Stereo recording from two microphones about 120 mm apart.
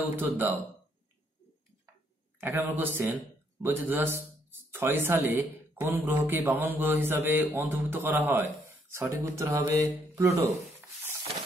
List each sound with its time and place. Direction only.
0.1 s a man's voice: 15° right (ahead or behind)
2.4 s a man's voice: 15° right (ahead or behind)